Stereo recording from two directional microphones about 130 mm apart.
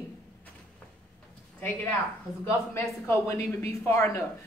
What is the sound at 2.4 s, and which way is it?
Speech, 20° left (ahead or behind).